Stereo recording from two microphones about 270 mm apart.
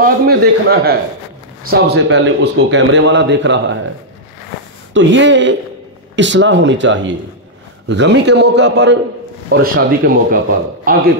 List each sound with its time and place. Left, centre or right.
0.0 s a man's voice: right
4.9 s a man's voice: right